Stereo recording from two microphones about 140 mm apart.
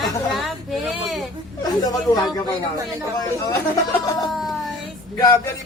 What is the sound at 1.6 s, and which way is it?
Speech, 25° left (ahead or behind).